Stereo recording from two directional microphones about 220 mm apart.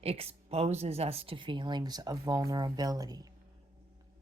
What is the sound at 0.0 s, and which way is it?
Speech, 25° right (ahead or behind).